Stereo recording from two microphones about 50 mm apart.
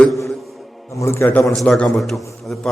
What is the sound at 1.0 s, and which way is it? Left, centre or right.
Speech, left.